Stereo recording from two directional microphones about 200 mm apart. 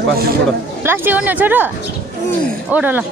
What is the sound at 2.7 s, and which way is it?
Speech, 10° right (ahead or behind).